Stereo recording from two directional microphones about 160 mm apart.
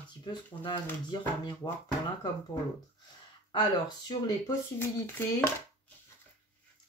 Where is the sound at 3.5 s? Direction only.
30° left (ahead or behind).